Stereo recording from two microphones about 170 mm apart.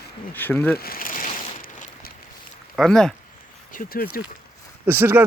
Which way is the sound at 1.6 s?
55° left (ahead or behind).